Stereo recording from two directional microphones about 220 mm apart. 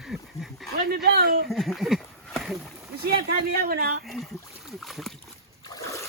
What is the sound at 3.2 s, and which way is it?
Speech, 45° right (ahead or behind).